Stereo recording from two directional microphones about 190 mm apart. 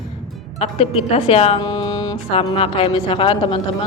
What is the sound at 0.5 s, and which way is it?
Speech, 35° left (ahead or behind).